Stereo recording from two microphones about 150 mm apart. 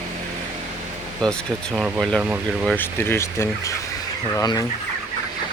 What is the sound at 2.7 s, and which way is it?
Speech, 15° left (ahead or behind).